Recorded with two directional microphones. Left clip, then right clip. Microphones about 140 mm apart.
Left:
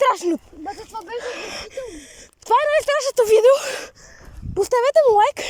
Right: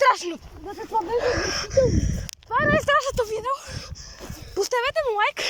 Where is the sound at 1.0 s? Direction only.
15° right (ahead or behind).